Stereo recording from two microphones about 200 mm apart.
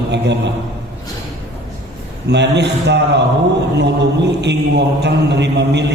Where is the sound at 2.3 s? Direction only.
60° right (ahead or behind).